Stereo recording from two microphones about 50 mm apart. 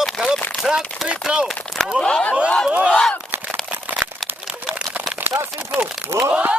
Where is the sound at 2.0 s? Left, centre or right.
Left.